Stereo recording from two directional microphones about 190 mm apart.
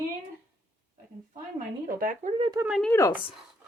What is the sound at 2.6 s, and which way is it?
Speech, centre (ahead or behind).